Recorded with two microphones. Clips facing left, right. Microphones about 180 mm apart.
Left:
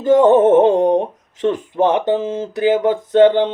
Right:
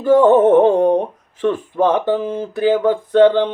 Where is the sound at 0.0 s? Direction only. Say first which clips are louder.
Even; 20° left (ahead or behind).